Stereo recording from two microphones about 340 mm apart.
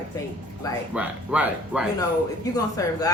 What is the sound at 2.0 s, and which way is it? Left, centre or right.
A man's voice, centre.